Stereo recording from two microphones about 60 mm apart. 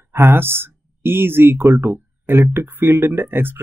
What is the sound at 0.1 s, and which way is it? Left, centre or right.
Speech, right.